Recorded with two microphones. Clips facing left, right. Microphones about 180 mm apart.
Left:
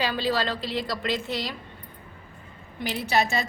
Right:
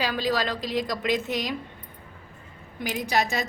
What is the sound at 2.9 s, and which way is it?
Speech, 15° right (ahead or behind).